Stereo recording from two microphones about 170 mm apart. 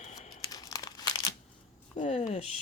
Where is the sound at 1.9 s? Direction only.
40° left (ahead or behind).